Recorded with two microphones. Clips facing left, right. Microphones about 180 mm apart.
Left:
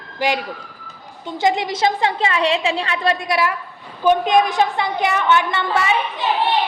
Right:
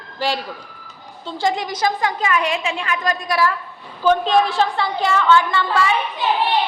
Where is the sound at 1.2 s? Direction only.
20° left (ahead or behind).